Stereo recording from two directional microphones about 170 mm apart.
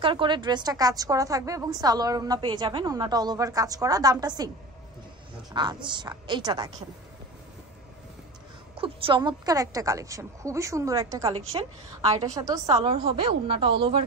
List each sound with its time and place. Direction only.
0.0 s a woman's voice: 30° right (ahead or behind)
5.5 s a woman's voice: 25° right (ahead or behind)
8.7 s a woman's voice: 30° right (ahead or behind)
11.5 s a woman's voice: 30° right (ahead or behind)
12.8 s speech: 35° right (ahead or behind)